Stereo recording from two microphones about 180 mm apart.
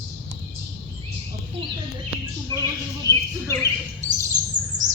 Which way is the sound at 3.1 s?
20° left (ahead or behind).